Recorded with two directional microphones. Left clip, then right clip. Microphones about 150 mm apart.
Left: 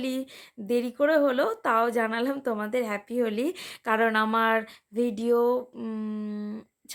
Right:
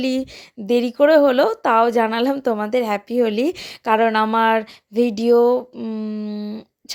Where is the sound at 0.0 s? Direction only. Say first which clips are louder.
Right 9 dB; 30° right (ahead or behind).